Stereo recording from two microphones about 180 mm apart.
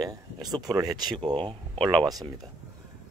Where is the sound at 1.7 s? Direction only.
5° left (ahead or behind).